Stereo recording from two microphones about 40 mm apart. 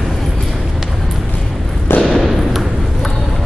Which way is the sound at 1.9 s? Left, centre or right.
Left.